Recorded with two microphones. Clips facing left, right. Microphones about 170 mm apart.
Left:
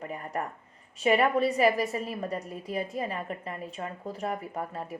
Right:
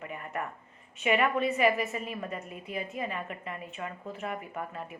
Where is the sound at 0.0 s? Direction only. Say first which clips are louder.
Left 3 dB; 35° left (ahead or behind).